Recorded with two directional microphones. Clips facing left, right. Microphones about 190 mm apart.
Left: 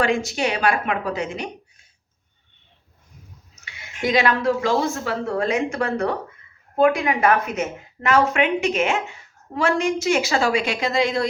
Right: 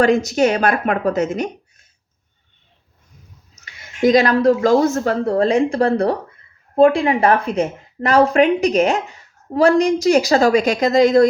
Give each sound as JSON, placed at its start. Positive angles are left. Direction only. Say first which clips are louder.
{"t": 0.0, "sound": "speech", "louder": "right 7 dB", "side_deg": -40}
{"t": 4.0, "sound": "a woman's voice", "louder": "right 7 dB", "side_deg": -40}